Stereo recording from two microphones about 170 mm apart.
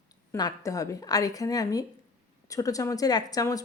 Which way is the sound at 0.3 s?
20° left (ahead or behind).